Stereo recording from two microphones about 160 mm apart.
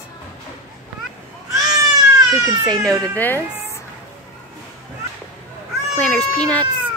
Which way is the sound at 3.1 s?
10° left (ahead or behind).